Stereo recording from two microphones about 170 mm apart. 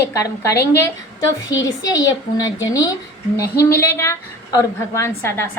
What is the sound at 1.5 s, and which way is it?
A woman's voice, 20° left (ahead or behind).